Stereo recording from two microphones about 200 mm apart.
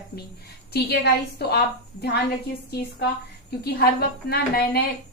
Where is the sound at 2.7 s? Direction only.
50° left (ahead or behind).